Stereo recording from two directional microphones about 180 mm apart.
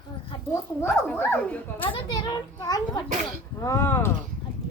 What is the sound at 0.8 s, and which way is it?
Speech, 10° left (ahead or behind).